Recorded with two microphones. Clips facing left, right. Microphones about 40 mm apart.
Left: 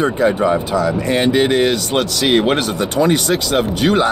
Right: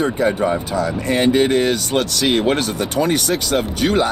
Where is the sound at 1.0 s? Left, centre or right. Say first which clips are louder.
Right 2 dB; left.